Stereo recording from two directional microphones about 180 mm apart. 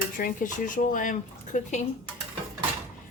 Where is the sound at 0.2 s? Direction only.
50° left (ahead or behind).